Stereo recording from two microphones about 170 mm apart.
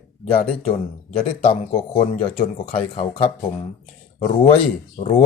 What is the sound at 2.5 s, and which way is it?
Speech, 35° left (ahead or behind).